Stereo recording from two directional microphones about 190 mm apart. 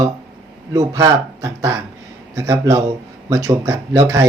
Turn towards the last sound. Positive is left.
turn(degrees=-15)  # may be behind; listen again after turning